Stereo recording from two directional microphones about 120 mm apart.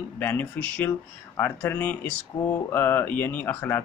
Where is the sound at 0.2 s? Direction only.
15° left (ahead or behind).